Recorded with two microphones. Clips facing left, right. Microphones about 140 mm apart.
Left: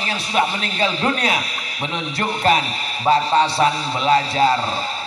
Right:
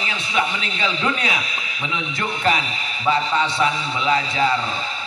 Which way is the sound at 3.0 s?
35° left (ahead or behind).